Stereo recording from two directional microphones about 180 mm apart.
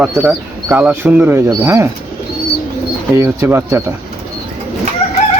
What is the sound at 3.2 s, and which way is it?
Speech, 15° right (ahead or behind).